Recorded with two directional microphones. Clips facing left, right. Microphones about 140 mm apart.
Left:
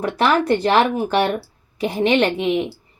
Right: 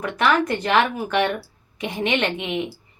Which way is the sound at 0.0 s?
30° left (ahead or behind).